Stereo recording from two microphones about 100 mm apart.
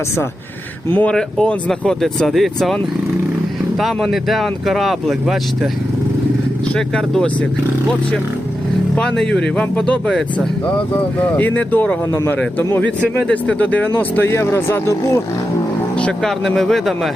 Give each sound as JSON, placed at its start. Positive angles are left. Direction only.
{"t": 0.9, "sound": "speech", "side_deg": 20}
{"t": 6.7, "sound": "speech", "side_deg": 5}
{"t": 9.0, "sound": "speech", "side_deg": 5}
{"t": 13.2, "sound": "speech", "side_deg": 15}
{"t": 16.0, "sound": "speech", "side_deg": 10}